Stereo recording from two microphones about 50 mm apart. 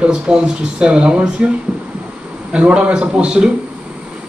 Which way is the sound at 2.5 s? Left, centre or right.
Centre.